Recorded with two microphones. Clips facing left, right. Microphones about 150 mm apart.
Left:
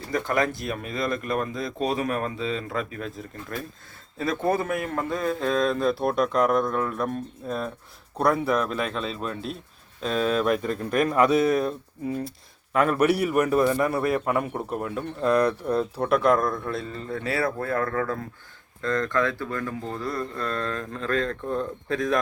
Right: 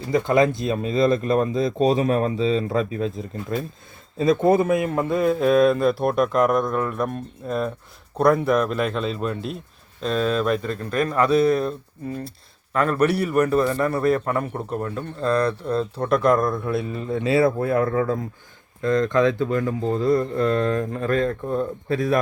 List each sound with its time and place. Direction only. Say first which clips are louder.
0.1 s a man's voice: right 7 dB; 20° right (ahead or behind); by 22.2 s 5° right (ahead or behind)